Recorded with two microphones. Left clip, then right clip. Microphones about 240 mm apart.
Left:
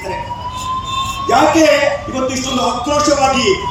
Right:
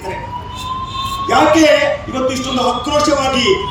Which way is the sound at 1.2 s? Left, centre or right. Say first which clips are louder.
Even; right.